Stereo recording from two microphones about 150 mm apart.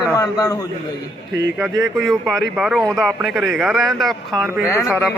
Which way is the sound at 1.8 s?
Centre (ahead or behind).